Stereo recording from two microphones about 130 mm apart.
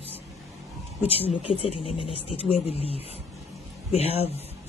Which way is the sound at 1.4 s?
50° left (ahead or behind).